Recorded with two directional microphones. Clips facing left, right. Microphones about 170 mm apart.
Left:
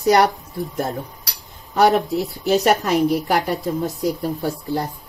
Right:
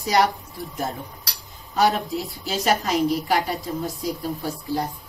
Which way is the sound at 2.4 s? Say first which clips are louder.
Left 6 dB; 60° left (ahead or behind).